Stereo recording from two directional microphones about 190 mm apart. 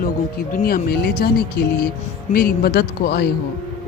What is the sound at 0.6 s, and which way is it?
Speech, 55° left (ahead or behind).